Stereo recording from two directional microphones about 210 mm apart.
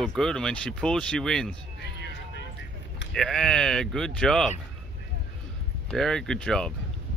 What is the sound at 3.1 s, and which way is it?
Speech, centre (ahead or behind).